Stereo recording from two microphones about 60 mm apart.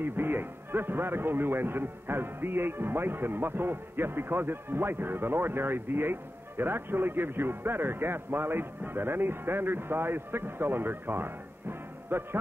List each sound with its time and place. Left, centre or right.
0.0 s a man's voice: right